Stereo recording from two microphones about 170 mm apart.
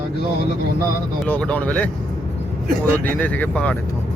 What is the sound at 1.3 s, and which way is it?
Speech, 10° left (ahead or behind).